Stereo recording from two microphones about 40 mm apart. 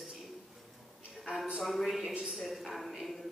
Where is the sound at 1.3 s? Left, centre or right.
Right.